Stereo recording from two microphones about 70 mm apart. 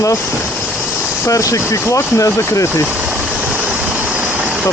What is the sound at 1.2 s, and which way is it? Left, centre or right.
Speech, left.